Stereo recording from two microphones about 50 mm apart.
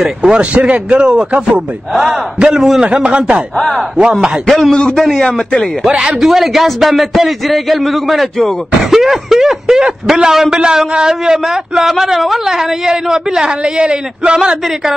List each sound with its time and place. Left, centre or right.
0.2 s a man's voice: right
2.4 s a man's voice: centre
2.8 s a man's voice: right
4.0 s a man's voice: centre
4.5 s speech: centre
5.9 s a man's voice: centre
6.2 s a man's voice: centre